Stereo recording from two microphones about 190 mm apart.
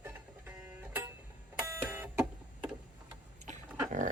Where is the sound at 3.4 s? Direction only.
40° right (ahead or behind).